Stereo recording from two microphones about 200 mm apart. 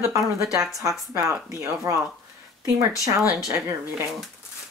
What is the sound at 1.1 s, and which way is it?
Speech, 15° right (ahead or behind).